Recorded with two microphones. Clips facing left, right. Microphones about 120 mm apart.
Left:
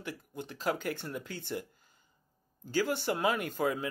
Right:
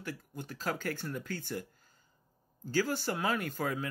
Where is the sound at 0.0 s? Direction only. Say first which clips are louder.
Left 1 dB; 20° left (ahead or behind).